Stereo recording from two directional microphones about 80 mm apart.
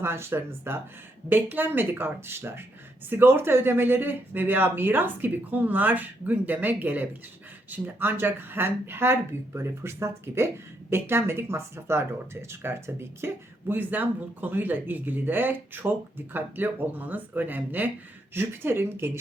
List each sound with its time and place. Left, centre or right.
0.0 s speech: right